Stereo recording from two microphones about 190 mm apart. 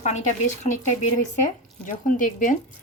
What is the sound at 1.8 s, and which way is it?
Speech, 45° left (ahead or behind).